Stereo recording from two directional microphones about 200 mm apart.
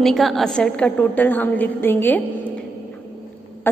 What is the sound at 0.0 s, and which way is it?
A woman's voice, centre (ahead or behind).